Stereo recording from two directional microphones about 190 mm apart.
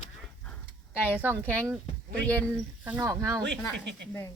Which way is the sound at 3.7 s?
65° right (ahead or behind).